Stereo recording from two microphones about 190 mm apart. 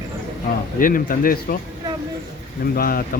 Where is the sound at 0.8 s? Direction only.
45° left (ahead or behind).